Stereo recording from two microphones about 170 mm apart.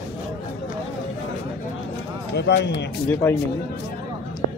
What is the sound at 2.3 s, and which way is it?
Speech, 80° left.